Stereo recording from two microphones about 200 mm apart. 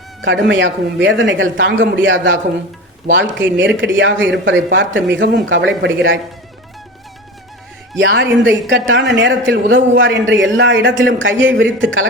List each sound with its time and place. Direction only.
0.2 s speech: 65° right (ahead or behind)
7.9 s speech: 65° right (ahead or behind)